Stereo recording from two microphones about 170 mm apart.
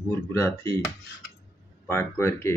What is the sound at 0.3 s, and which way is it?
Speech, 15° left (ahead or behind).